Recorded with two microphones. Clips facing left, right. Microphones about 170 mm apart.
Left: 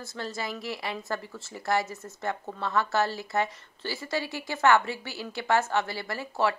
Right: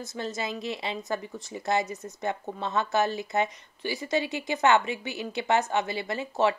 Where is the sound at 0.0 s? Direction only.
20° right (ahead or behind).